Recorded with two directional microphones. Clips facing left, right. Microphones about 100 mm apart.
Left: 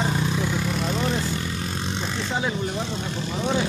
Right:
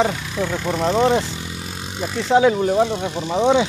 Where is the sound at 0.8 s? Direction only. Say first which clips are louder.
Right 12 dB; 85° right.